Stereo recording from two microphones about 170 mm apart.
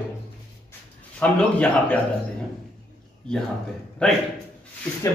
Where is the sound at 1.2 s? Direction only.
10° left (ahead or behind).